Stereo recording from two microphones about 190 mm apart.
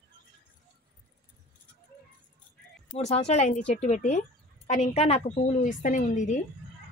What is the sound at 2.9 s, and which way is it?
A woman's voice, 30° left (ahead or behind).